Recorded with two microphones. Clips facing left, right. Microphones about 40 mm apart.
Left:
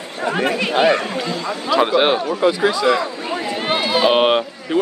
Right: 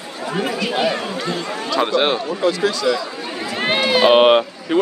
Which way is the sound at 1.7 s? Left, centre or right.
Centre.